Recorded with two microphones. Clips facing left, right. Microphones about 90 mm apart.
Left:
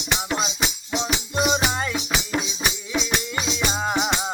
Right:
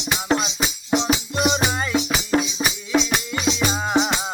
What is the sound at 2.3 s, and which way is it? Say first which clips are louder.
Music: right 8 dB; 45° right (ahead or behind).